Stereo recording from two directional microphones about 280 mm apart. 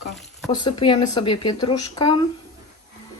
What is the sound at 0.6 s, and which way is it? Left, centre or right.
A woman's voice, centre.